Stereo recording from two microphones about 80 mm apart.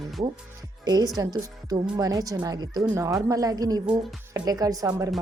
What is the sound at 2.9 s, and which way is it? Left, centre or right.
A woman's voice, right.